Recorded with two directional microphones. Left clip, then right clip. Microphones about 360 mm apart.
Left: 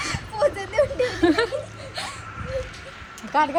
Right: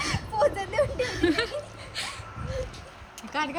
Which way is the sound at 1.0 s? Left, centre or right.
Centre.